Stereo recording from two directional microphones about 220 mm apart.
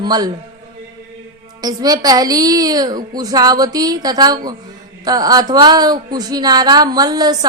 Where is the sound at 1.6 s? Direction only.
15° right (ahead or behind).